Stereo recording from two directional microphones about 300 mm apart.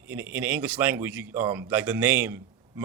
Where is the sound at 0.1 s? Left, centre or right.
Centre.